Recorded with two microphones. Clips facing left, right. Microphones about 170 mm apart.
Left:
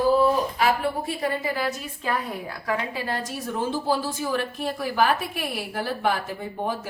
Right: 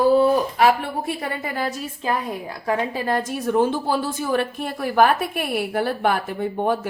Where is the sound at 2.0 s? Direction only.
20° right (ahead or behind).